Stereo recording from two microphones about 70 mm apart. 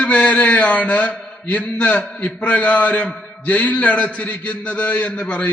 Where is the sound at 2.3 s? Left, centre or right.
Centre.